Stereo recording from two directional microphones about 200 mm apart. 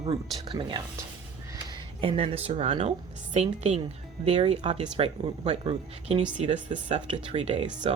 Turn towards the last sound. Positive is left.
turn(degrees=-30)  # may be behind; listen again after turning